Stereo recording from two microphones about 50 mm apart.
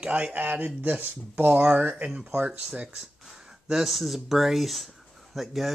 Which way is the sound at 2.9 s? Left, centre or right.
Centre.